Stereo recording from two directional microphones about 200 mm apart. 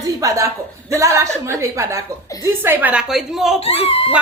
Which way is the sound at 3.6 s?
30° left (ahead or behind).